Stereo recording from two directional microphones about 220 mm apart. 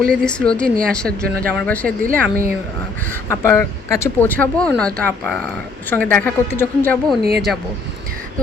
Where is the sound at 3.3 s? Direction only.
10° left (ahead or behind).